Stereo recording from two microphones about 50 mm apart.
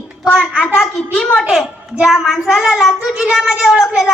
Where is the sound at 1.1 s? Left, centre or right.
Centre.